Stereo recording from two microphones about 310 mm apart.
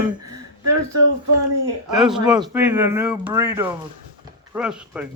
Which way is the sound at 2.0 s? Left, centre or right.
Centre.